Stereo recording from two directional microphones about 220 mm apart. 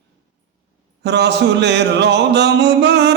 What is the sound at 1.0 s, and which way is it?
Speech, 50° right (ahead or behind).